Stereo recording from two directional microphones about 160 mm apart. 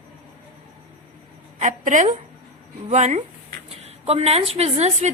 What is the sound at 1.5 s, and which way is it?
A woman's voice, 50° right (ahead or behind).